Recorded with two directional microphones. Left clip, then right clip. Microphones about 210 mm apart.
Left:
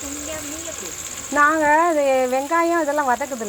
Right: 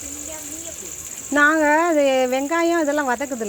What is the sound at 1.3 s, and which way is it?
Speech, 55° right (ahead or behind).